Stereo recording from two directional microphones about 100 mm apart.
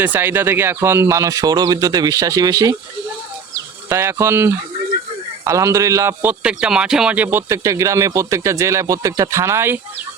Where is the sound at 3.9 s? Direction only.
25° right (ahead or behind).